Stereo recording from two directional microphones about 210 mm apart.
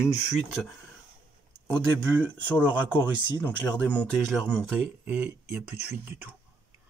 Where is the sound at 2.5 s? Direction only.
10° right (ahead or behind).